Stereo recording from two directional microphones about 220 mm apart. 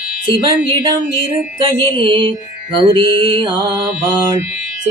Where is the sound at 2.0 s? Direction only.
20° right (ahead or behind).